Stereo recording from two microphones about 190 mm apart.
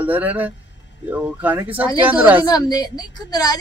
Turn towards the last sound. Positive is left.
turn(degrees=20)  # may be behind; listen again after turning